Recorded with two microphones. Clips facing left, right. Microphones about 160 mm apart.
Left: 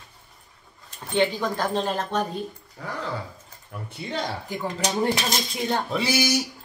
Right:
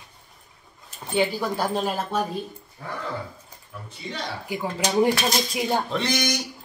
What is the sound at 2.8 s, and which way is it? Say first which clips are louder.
Dog: left 1 dB; 80° left.